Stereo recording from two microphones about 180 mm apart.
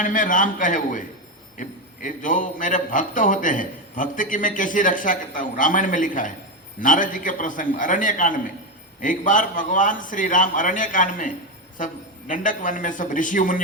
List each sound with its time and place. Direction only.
0.0 s a man's voice: 45° left (ahead or behind)